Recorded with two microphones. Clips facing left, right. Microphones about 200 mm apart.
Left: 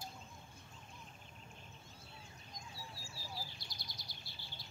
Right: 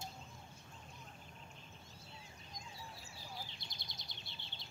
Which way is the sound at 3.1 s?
20° right (ahead or behind).